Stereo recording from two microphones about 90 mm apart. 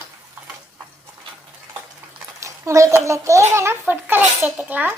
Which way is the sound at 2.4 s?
35° right (ahead or behind).